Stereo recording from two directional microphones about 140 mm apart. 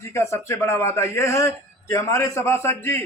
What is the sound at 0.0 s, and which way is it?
A man's voice, 20° left (ahead or behind).